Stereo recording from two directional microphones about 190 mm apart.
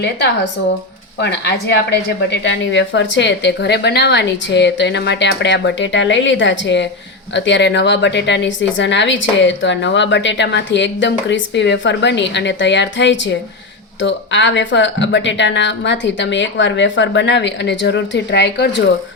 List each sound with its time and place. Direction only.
1.2 s a woman's voice: 65° left (ahead or behind)